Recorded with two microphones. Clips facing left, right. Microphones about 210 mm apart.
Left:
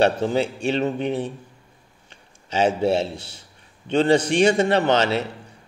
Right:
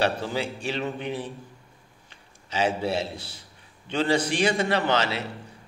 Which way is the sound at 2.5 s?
25° left (ahead or behind).